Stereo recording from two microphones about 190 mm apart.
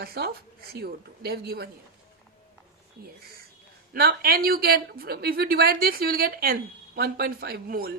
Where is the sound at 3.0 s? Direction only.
55° right (ahead or behind).